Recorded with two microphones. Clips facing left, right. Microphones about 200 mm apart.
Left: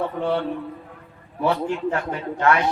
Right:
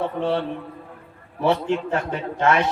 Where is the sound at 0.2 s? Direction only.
20° right (ahead or behind).